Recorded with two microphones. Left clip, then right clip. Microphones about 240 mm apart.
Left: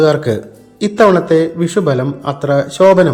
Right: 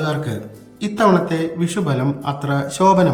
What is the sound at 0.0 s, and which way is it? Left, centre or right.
Speech, centre.